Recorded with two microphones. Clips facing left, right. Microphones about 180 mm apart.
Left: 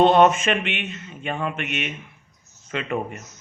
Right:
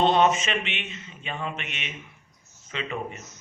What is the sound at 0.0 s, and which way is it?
Speech, 55° left (ahead or behind).